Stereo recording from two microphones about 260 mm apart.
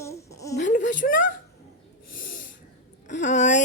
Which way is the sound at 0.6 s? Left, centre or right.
Left.